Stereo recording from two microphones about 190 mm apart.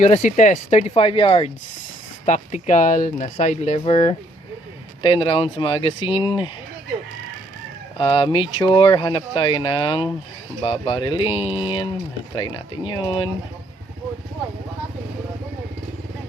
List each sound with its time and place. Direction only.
0.0 s speech: 35° left (ahead or behind)
7.9 s speech: 25° left (ahead or behind)